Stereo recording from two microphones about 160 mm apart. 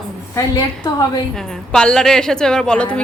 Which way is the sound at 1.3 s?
5° left (ahead or behind).